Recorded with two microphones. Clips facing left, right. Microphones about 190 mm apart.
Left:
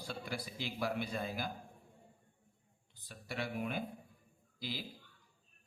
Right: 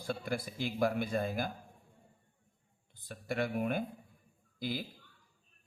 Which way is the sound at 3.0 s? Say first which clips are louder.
Right 7 dB; 50° right (ahead or behind).